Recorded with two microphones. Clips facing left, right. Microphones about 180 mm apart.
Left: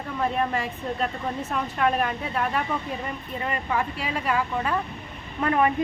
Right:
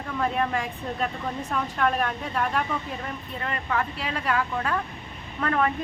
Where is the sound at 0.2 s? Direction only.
5° left (ahead or behind).